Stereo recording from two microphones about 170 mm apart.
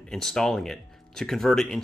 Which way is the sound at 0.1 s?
5° left (ahead or behind).